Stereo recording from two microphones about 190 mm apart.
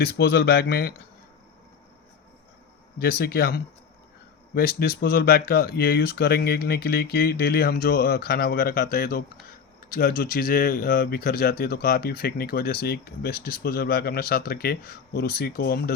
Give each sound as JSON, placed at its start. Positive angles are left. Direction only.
{"t": 0.0, "sound": "speech", "side_deg": 55}
{"t": 3.0, "sound": "speech", "side_deg": 55}